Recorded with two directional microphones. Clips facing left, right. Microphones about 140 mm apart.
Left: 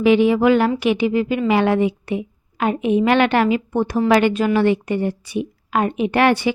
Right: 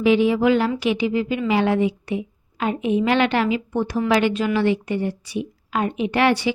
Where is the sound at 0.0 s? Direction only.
60° left (ahead or behind).